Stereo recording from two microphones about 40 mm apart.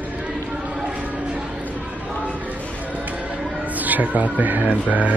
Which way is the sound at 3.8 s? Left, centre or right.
Right.